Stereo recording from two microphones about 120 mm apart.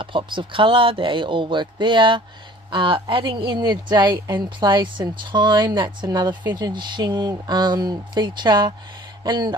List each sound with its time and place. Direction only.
0.0 s speech: 45° right (ahead or behind)